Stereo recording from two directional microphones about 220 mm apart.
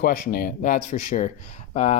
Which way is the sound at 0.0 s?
40° left (ahead or behind).